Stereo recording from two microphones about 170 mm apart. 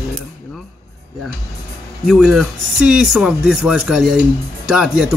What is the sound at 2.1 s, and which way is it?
Speech, centre (ahead or behind).